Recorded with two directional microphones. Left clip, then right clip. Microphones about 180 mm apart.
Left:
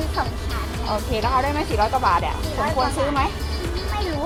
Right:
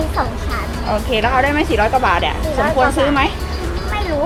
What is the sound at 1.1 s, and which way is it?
Speech, 20° right (ahead or behind).